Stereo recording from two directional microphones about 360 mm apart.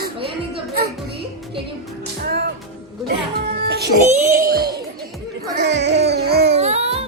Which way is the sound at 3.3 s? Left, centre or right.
Right.